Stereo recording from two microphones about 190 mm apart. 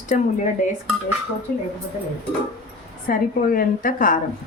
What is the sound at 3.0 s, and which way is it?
A woman's voice, 45° left (ahead or behind).